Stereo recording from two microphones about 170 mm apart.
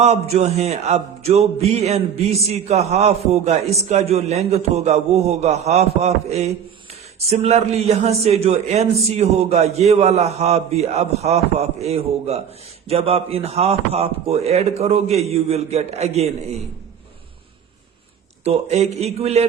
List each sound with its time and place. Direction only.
0.0 s a man's voice: 40° right (ahead or behind)
18.4 s a man's voice: 40° right (ahead or behind)